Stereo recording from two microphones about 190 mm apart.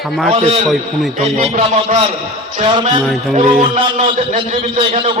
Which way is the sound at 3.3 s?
40° right (ahead or behind).